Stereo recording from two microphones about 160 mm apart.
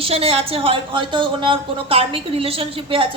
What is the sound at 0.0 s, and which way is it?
A woman's voice, 35° right (ahead or behind).